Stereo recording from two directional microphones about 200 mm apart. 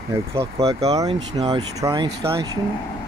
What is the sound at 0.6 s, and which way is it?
Speech, 30° right (ahead or behind).